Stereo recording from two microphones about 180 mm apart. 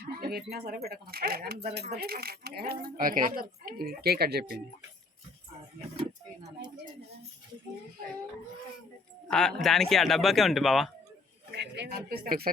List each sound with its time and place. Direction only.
0.0 s a sound: 60° right (ahead or behind)
0.5 s speech: 60° right (ahead or behind)
9.3 s speech: 5° left (ahead or behind)
11.5 s speech: 70° right (ahead or behind); by 12.5 s 55° right (ahead or behind)